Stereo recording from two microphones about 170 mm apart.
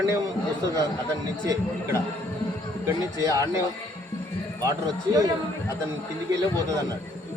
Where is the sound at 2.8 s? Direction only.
20° right (ahead or behind).